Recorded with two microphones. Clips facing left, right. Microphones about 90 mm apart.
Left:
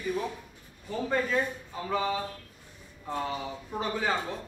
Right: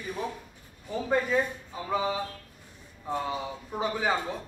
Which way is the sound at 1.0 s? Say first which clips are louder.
Right 2 dB; 15° right (ahead or behind).